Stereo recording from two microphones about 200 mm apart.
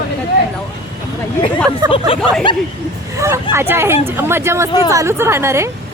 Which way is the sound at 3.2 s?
15° right (ahead or behind).